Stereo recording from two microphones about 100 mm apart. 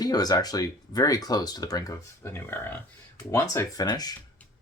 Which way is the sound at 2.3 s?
20° left (ahead or behind).